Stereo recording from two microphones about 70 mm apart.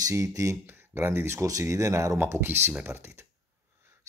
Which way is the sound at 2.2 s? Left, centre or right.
Right.